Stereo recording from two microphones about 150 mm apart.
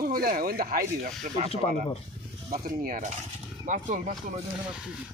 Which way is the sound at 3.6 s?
55° right (ahead or behind).